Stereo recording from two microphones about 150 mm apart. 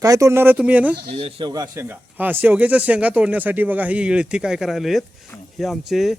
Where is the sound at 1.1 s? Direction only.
40° right (ahead or behind).